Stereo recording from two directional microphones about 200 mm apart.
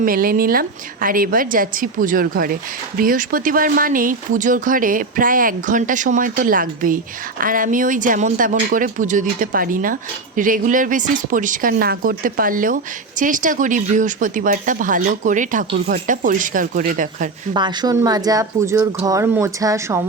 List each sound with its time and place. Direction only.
0.0 s speech: 45° right (ahead or behind)
17.5 s speech: 20° right (ahead or behind)